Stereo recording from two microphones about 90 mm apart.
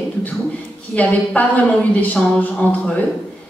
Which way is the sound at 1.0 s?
15° left (ahead or behind).